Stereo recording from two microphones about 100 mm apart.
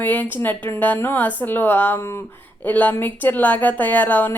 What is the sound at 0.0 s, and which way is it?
Speech, 15° left (ahead or behind).